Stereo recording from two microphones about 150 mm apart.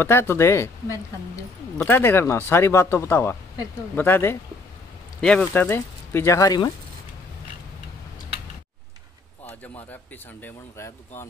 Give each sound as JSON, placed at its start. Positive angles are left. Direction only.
{"t": 0.0, "sound": "speech", "side_deg": 15}
{"t": 5.2, "sound": "speech", "side_deg": 5}
{"t": 10.4, "sound": "speech", "side_deg": 15}